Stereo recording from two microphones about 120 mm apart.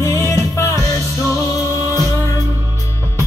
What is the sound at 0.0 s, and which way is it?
Music, 25° left (ahead or behind).